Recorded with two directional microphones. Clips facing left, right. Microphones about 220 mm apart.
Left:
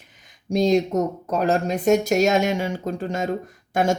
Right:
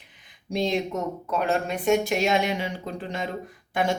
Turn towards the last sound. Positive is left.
turn(degrees=45)  # may be behind; listen again after turning